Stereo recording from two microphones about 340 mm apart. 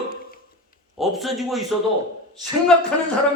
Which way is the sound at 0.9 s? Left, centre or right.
Centre.